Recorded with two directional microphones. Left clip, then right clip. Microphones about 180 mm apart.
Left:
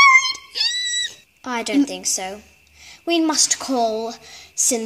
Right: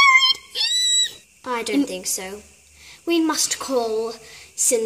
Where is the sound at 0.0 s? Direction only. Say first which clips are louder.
Left 2 dB; centre (ahead or behind).